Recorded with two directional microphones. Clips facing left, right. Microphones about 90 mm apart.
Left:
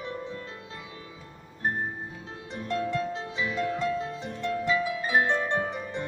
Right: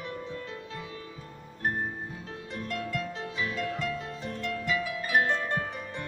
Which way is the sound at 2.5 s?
25° left (ahead or behind).